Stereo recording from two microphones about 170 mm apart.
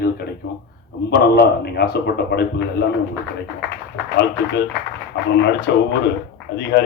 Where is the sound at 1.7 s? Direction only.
70° left (ahead or behind).